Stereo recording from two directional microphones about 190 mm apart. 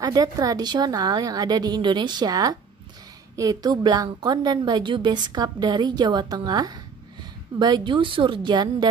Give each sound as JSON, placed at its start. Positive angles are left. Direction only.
{"t": 0.0, "sound": "a woman's voice", "side_deg": -20}